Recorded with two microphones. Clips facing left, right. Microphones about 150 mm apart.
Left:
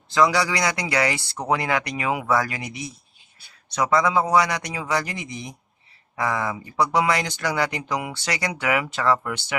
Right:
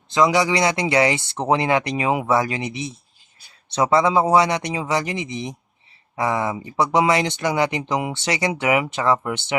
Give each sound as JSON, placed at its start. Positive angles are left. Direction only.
{"t": 0.1, "sound": "speech", "side_deg": -20}